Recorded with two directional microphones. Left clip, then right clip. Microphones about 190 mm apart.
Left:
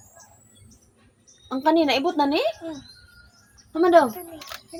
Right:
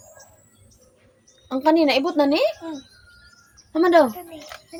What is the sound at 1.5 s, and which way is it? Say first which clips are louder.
A woman's voice: right 2 dB; 30° right (ahead or behind).